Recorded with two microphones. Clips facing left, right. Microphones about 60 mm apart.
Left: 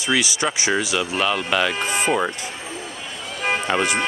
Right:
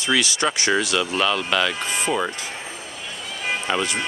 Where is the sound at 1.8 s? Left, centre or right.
Left.